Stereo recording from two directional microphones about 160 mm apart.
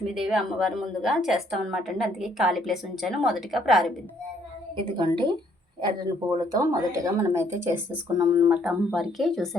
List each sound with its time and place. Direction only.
0.1 s a woman's voice: 5° right (ahead or behind)
4.9 s speech: 30° right (ahead or behind)
8.2 s a woman's voice: 5° right (ahead or behind)